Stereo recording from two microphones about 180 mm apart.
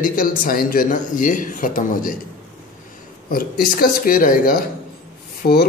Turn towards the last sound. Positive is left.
turn(degrees=55)  # may be behind; listen again after turning